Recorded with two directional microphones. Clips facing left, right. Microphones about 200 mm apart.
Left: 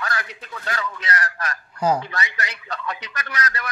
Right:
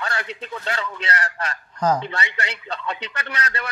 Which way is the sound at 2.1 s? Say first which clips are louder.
Right 1 dB; 30° right (ahead or behind).